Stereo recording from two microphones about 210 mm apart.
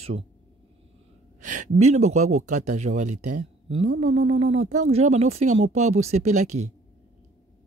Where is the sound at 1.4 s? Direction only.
35° right (ahead or behind).